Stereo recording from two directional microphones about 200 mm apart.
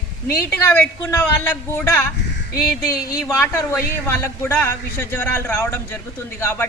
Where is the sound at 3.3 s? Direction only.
15° left (ahead or behind).